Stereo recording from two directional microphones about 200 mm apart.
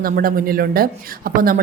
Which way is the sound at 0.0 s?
45° right (ahead or behind).